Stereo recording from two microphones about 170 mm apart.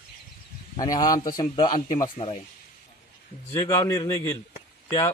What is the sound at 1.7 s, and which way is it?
Speech, 50° left (ahead or behind).